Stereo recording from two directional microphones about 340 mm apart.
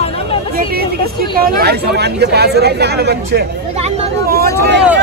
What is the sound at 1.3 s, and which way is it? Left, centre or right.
Speech, right.